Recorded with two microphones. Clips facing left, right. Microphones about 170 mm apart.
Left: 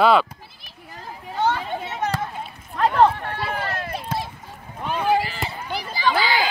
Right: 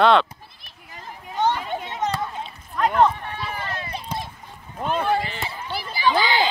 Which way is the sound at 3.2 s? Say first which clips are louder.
Left 4 dB; 60° left (ahead or behind).